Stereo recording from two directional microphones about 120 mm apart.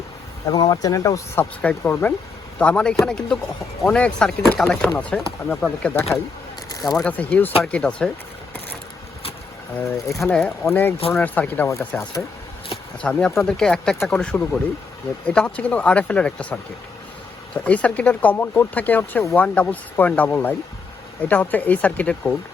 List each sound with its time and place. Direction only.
0.5 s speech: 35° left (ahead or behind)
1.6 s speech: 15° left (ahead or behind)
6.7 s a sound: 30° left (ahead or behind)
6.9 s speech: 10° left (ahead or behind)
10.2 s speech: 10° left (ahead or behind)
13.0 s speech: 10° left (ahead or behind)